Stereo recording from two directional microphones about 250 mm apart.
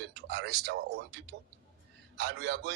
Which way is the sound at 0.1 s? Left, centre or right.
Right.